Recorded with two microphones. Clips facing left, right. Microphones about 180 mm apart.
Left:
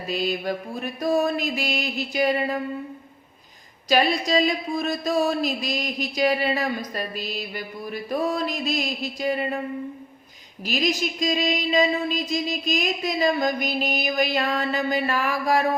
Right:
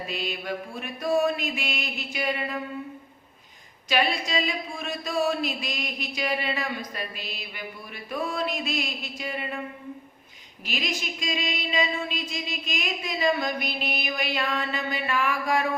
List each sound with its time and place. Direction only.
0.1 s speech: 40° left (ahead or behind)
3.8 s speech: 40° left (ahead or behind)
10.7 s speech: 40° left (ahead or behind)